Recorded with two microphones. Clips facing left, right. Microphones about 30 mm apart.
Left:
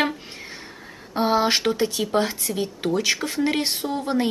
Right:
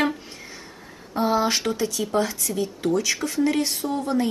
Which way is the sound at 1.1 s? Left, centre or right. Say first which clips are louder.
Left 1 dB; left.